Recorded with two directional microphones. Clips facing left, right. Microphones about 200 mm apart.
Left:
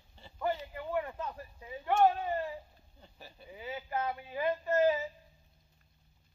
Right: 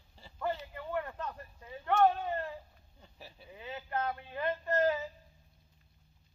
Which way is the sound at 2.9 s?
Centre (ahead or behind).